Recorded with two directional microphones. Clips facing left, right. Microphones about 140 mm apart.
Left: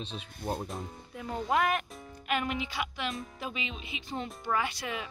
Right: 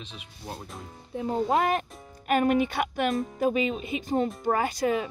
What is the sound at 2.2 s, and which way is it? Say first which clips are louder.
Speech: right 9 dB; 45° right (ahead or behind).